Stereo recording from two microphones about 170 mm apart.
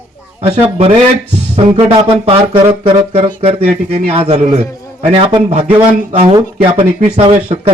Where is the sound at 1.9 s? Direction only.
35° right (ahead or behind).